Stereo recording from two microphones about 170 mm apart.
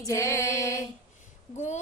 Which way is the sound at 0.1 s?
15° left (ahead or behind).